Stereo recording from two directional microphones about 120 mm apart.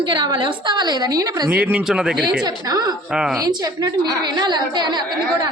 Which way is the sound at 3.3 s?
30° right (ahead or behind).